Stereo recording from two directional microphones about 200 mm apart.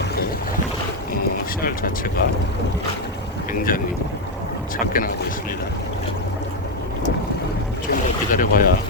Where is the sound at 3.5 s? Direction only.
45° left (ahead or behind).